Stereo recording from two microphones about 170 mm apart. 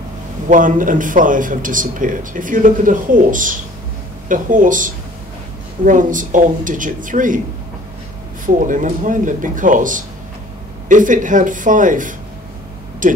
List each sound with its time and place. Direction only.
0.5 s speech: 50° right (ahead or behind)
8.5 s speech: 50° right (ahead or behind)